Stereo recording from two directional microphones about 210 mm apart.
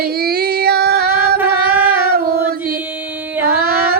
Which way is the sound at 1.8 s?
45° right (ahead or behind).